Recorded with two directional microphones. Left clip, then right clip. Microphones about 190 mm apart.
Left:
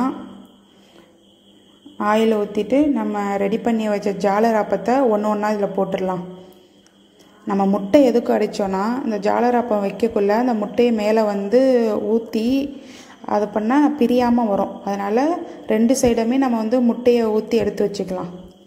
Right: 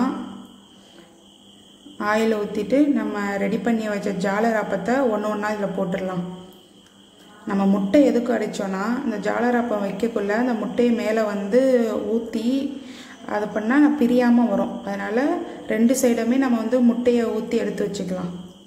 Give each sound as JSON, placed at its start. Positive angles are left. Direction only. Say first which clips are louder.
{"t": 2.0, "sound": "a woman's voice", "louder": "left 4 dB", "side_deg": 25}
{"t": 7.4, "sound": "a woman's voice", "louder": "left 3 dB", "side_deg": 20}